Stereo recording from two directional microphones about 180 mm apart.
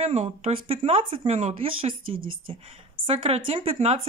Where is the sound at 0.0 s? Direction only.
35° right (ahead or behind).